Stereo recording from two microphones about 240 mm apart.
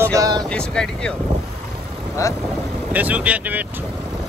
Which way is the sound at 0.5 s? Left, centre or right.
Centre.